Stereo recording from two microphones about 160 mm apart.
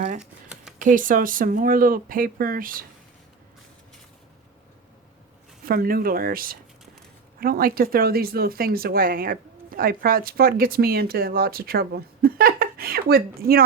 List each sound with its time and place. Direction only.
0.2 s a sound: 5° right (ahead or behind)
0.8 s speech: 55° right (ahead or behind)
5.6 s speech: 65° right (ahead or behind)